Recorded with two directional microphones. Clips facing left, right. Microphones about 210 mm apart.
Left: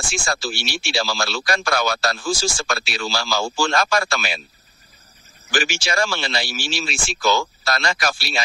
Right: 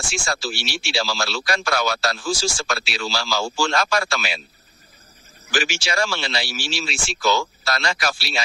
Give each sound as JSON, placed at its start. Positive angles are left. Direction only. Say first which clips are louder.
{"t": 0.1, "sound": "speech", "louder": "left 1 dB", "side_deg": 50}
{"t": 5.5, "sound": "speech", "louder": "left 1 dB", "side_deg": 50}